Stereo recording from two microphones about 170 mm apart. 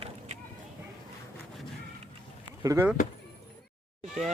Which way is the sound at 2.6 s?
15° right (ahead or behind).